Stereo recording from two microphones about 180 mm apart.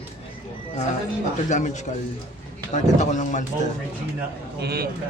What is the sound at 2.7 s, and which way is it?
Speech, 40° left (ahead or behind).